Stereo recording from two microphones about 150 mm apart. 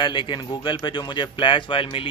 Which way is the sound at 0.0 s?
30° left (ahead or behind).